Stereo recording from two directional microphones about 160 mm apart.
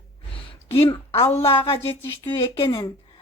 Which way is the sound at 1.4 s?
35° left (ahead or behind).